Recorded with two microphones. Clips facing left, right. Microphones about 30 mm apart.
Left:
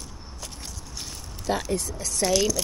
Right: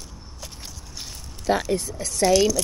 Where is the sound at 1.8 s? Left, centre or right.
Centre.